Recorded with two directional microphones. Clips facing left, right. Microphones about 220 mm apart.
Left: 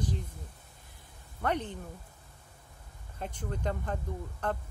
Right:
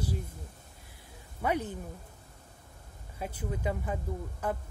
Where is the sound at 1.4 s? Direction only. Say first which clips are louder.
Right 1 dB; 10° right (ahead or behind).